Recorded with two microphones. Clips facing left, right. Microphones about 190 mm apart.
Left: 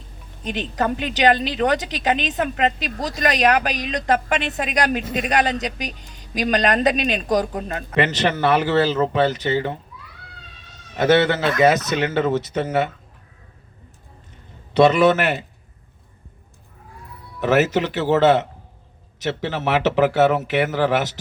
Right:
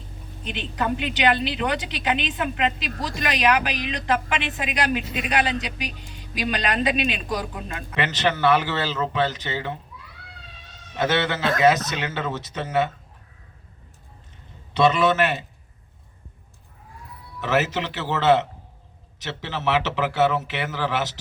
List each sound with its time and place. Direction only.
0.4 s a woman's voice: 40° left (ahead or behind)
10.9 s speech: 45° left (ahead or behind)
14.7 s a man's voice: 45° left (ahead or behind)
17.4 s speech: 45° left (ahead or behind)